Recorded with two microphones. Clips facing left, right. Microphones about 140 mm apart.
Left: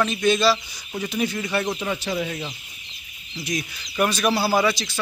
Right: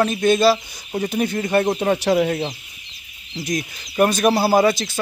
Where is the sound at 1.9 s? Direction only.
60° right (ahead or behind).